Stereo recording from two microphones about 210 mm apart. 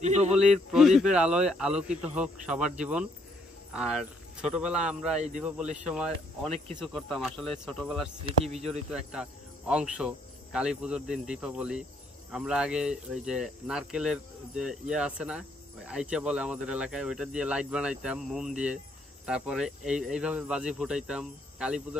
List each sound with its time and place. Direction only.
0.0 s a man's voice: 30° right (ahead or behind)
0.5 s speech: centre (ahead or behind)